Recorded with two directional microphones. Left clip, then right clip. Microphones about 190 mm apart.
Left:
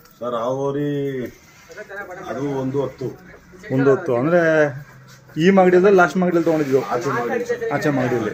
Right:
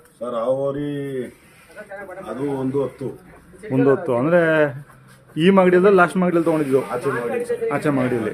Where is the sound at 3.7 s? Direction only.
5° right (ahead or behind).